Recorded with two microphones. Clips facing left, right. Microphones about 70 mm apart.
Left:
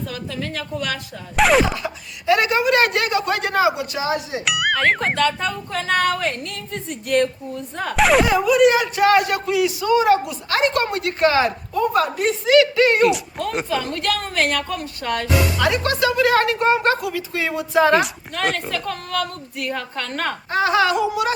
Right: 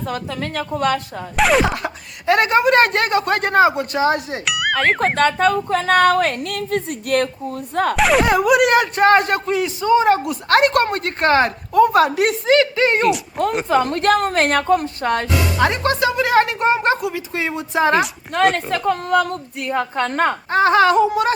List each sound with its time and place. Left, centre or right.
0.1 s speech: right
1.4 s speech: centre
1.7 s speech: right
4.4 s speech: centre
4.9 s speech: right
6.2 s a woman's voice: right
7.9 s speech: centre
8.3 s a woman's voice: right
9.0 s a woman's voice: right
10.2 s a woman's voice: right
12.7 s speech: right
13.0 s speech: centre
13.7 s a woman's voice: right